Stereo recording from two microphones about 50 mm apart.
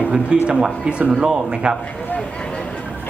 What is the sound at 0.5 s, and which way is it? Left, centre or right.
Speech, centre.